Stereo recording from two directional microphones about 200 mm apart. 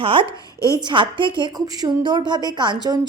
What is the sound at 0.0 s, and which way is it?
A woman's voice, 25° right (ahead or behind).